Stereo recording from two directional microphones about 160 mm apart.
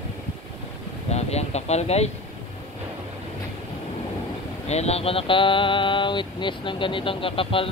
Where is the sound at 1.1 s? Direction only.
40° left (ahead or behind).